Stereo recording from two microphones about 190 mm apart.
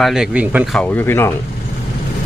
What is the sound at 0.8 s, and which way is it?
Speech, 10° left (ahead or behind).